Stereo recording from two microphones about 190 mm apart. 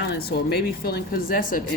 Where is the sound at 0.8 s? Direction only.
55° left (ahead or behind).